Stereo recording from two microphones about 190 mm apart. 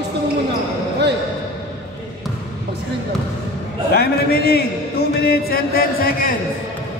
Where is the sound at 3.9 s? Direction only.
55° left (ahead or behind).